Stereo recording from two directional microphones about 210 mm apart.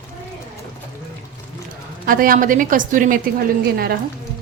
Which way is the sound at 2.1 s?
40° right (ahead or behind).